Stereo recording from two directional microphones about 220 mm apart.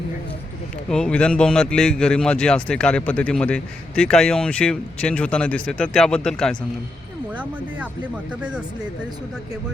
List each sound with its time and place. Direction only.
0.9 s a man's voice: 5° left (ahead or behind)
8.4 s a man's voice: 5° right (ahead or behind)